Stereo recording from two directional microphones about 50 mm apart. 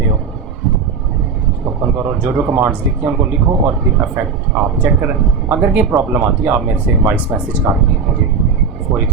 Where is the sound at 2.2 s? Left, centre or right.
Right.